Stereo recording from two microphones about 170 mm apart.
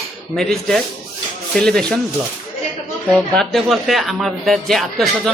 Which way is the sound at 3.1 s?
5° left (ahead or behind).